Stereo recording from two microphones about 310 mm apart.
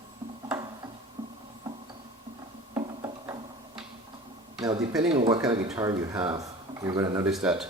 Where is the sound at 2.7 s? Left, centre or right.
Centre.